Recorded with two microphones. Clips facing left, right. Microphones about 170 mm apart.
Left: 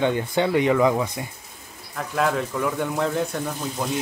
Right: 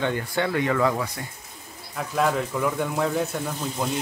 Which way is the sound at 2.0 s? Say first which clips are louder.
Even; centre (ahead or behind).